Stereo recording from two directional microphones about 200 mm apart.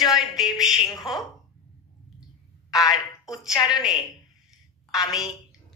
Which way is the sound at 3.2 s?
Centre (ahead or behind).